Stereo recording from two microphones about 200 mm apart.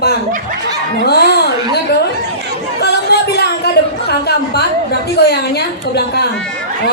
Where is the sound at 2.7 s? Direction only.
55° left (ahead or behind).